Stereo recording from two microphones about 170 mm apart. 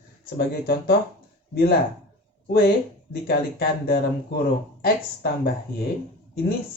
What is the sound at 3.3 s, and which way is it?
Speech, 60° left (ahead or behind).